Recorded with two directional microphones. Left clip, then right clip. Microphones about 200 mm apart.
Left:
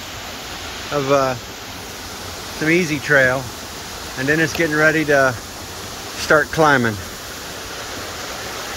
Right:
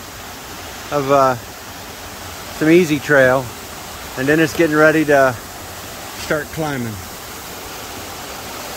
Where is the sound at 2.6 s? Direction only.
30° right (ahead or behind).